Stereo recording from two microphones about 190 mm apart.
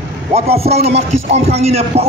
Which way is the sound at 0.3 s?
30° right (ahead or behind).